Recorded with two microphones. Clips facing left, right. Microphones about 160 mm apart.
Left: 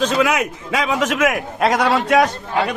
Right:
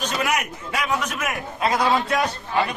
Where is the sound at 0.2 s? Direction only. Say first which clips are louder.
Left 7 dB; 90° left.